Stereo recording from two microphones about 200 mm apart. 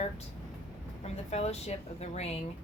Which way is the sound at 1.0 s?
30° left (ahead or behind).